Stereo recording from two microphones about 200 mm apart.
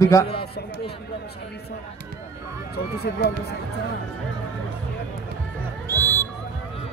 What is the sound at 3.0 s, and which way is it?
Speech, 55° left (ahead or behind).